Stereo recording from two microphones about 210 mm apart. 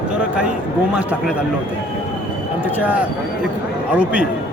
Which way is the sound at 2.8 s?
5° right (ahead or behind).